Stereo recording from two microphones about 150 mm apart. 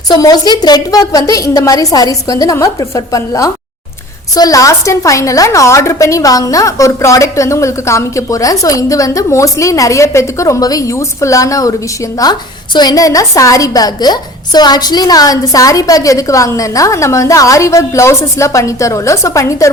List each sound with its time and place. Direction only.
0.1 s a woman's voice: 25° left (ahead or behind)